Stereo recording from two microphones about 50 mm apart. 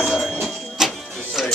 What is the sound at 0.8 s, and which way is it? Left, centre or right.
Printer, centre.